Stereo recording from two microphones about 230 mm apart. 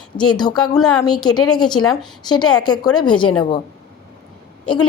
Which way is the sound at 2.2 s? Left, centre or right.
Centre.